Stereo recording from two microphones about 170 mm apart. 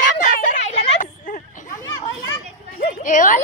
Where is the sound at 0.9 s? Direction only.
50° left (ahead or behind).